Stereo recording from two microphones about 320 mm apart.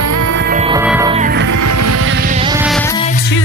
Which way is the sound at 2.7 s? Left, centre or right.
Centre.